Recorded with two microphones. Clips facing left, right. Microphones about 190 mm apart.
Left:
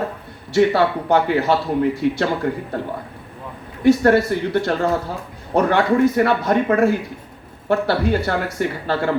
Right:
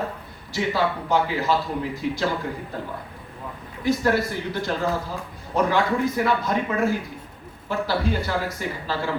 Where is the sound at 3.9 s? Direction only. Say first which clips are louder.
Left 8 dB; 65° left (ahead or behind).